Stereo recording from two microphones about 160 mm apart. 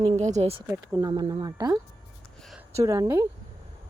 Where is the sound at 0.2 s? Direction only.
45° right (ahead or behind).